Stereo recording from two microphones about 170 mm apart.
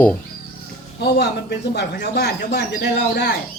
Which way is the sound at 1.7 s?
75° left (ahead or behind).